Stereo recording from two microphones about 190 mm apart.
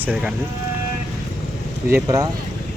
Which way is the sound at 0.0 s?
5° right (ahead or behind).